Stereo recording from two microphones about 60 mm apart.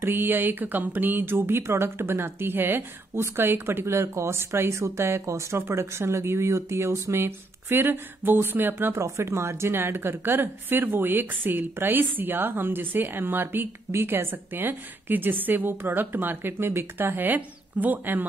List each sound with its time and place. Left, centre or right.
0.0 s a woman's voice: right
9.0 s a woman's voice: right